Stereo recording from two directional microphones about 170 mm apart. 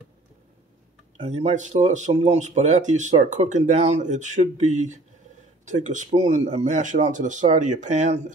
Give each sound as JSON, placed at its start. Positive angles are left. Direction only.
{"t": 1.1, "sound": "speech", "side_deg": -40}